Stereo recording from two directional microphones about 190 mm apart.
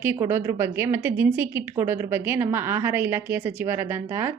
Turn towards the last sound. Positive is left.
turn(degrees=-15)  # may be behind; listen again after turning